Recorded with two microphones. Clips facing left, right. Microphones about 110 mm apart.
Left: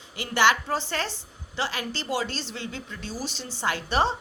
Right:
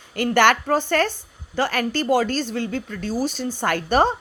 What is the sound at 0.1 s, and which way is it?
A woman's voice, 55° right (ahead or behind).